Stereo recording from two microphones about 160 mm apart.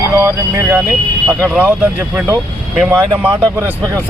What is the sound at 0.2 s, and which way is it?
Speech, 15° right (ahead or behind).